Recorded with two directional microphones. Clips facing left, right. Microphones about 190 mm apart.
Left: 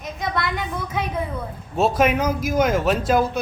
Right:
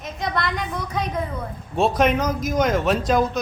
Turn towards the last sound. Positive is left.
turn(degrees=5)  # may be behind; listen again after turning